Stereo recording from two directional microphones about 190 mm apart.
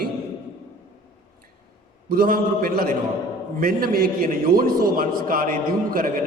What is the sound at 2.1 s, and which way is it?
A man's voice, 50° right (ahead or behind).